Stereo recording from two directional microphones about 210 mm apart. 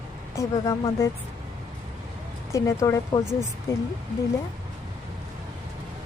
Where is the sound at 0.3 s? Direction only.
15° left (ahead or behind).